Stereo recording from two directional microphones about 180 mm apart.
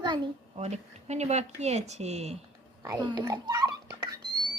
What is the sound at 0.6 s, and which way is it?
Speech, 40° right (ahead or behind).